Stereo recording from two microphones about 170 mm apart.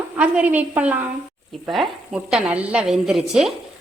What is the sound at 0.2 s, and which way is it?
A woman's voice, 10° right (ahead or behind).